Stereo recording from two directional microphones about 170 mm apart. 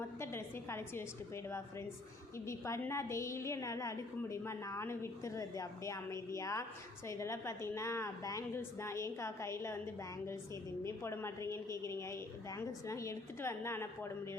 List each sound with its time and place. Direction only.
0.2 s a woman's voice: 15° left (ahead or behind)
2.5 s a woman's voice: 15° left (ahead or behind)